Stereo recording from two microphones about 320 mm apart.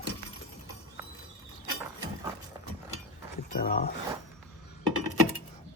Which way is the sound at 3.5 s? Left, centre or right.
Left.